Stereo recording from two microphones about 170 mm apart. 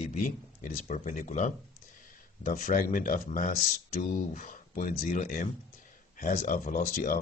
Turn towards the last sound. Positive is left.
turn(degrees=55)  # may be behind; listen again after turning